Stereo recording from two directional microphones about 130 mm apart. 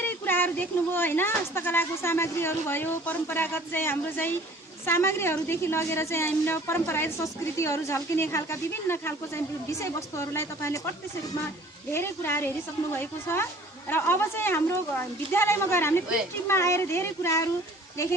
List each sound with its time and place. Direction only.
0.0 s a woman's voice: 15° left (ahead or behind)
11.9 s a woman's voice: 20° left (ahead or behind)